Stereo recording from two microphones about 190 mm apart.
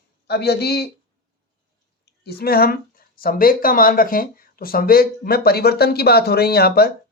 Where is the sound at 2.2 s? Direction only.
55° left (ahead or behind).